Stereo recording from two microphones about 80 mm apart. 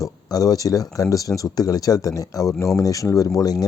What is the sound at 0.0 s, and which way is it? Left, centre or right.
Speech, left.